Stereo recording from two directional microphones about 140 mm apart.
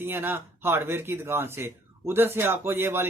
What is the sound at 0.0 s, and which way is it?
Speech, 15° right (ahead or behind).